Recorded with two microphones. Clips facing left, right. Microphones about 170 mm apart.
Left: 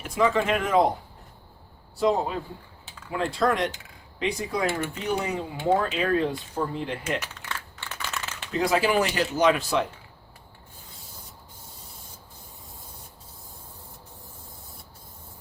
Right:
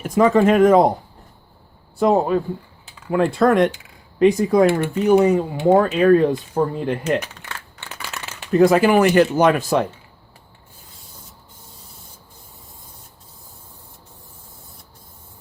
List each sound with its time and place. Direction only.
0.0 s speech: 45° right (ahead or behind)
2.0 s speech: 55° right (ahead or behind)
8.5 s speech: 50° right (ahead or behind)